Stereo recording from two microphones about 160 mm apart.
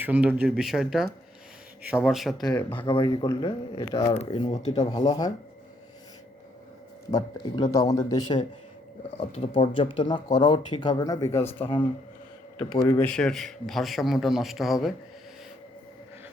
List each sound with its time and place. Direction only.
0.0 s a man's voice: 10° right (ahead or behind)
2.6 s speech: 10° left (ahead or behind)
2.8 s speech: 30° left (ahead or behind)
4.1 s speech: 35° left (ahead or behind)
7.1 s speech: 25° left (ahead or behind)
9.0 s speech: 40° left (ahead or behind)
13.0 s a man's voice: 5° left (ahead or behind)